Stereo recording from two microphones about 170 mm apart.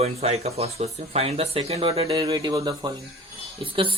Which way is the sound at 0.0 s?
35° right (ahead or behind).